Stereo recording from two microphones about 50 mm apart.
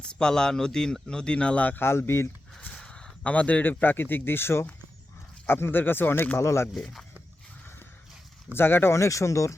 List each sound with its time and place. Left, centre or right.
0.0 s a man's voice: centre
1.7 s speech: left
2.7 s a sound: centre
3.3 s speech: left
6.3 s speech: left
8.5 s speech: left
9.0 s speech: left